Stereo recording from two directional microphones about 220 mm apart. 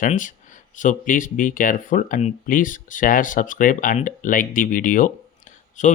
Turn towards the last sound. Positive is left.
turn(degrees=35)  # may be behind; listen again after turning